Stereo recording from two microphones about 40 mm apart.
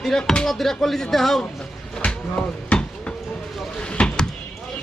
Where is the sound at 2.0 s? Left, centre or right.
Left.